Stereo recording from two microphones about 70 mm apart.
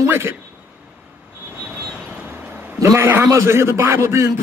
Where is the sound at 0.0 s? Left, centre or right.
Right.